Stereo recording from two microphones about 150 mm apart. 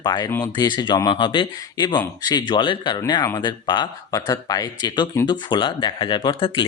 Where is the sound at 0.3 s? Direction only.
15° left (ahead or behind).